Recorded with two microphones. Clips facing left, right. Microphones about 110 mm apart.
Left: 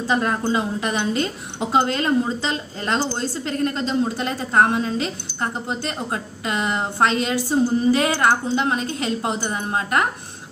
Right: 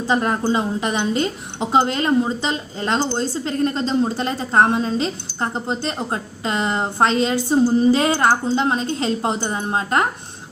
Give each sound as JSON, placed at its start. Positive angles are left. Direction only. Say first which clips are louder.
{"t": 0.1, "sound": "a woman's voice", "louder": "right 2 dB", "side_deg": -25}